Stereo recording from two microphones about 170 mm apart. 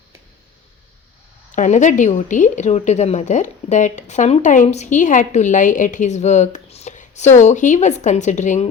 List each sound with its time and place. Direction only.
1.5 s a woman's voice: 45° left (ahead or behind)